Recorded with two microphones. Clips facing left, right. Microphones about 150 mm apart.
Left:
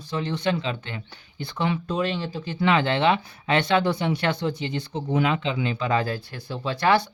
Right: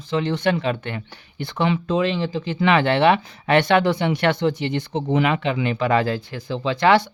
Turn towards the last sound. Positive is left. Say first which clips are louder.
# right 4 dB
turn(degrees=-90)